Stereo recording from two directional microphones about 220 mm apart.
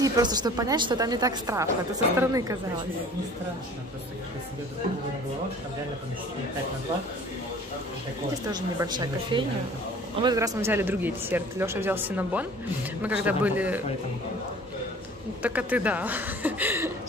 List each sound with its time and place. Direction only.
0.0 s speech: 20° right (ahead or behind)
8.5 s speech: 20° right (ahead or behind)
15.4 s speech: 5° right (ahead or behind)